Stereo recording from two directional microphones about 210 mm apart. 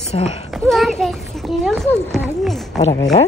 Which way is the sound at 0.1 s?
30° left (ahead or behind).